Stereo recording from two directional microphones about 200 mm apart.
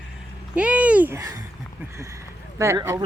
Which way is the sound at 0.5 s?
5° right (ahead or behind).